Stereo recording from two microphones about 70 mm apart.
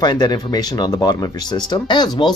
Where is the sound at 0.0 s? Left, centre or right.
Left.